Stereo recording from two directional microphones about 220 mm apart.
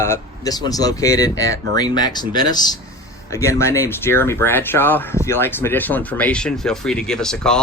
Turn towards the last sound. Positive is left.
turn(degrees=5)  # may be behind; listen again after turning